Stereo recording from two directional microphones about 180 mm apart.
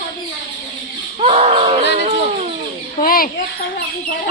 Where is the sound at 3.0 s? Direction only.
55° left (ahead or behind).